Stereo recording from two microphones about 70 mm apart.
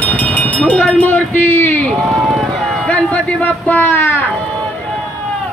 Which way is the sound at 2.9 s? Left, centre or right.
Left.